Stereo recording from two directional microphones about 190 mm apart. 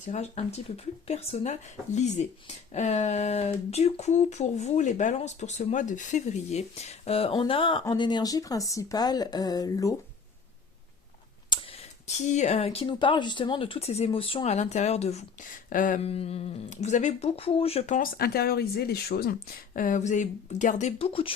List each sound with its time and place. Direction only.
0.0 s speech: 35° left (ahead or behind); by 9.9 s 20° left (ahead or behind)
11.4 s speech: 25° left (ahead or behind)